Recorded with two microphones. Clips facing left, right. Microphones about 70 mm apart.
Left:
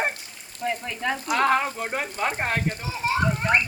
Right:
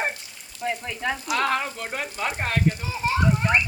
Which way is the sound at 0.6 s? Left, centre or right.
Centre.